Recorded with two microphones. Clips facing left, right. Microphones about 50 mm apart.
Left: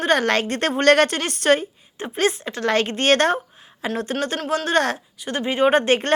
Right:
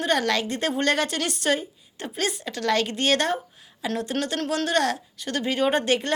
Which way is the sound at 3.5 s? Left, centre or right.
Left.